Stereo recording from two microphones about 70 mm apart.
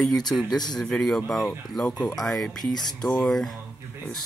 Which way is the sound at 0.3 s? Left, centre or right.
Centre.